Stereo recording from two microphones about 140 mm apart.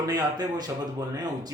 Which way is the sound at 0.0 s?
25° right (ahead or behind).